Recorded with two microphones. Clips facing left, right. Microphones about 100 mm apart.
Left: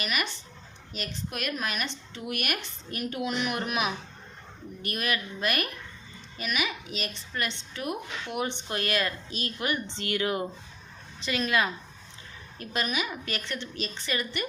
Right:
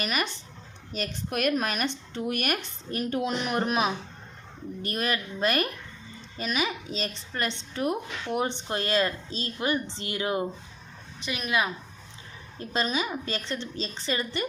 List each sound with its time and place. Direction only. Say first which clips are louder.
0.0 s a woman's voice: right 2 dB; 40° right (ahead or behind); by 11.7 s 15° right (ahead or behind)
12.5 s a woman's voice: right 3 dB; 25° right (ahead or behind)